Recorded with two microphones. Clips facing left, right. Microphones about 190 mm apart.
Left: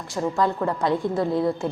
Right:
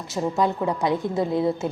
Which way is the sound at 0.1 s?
20° right (ahead or behind).